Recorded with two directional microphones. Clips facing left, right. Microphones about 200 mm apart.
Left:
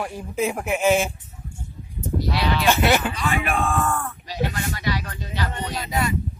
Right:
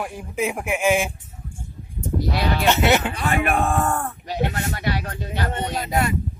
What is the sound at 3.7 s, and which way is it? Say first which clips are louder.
Speech: right 2 dB; 40° right (ahead or behind).